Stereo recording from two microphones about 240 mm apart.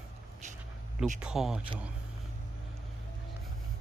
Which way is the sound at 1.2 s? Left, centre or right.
Centre.